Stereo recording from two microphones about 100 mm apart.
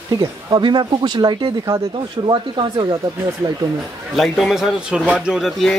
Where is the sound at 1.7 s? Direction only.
75° right (ahead or behind).